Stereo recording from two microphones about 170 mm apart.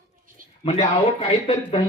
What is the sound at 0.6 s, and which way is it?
Speech, 40° left (ahead or behind).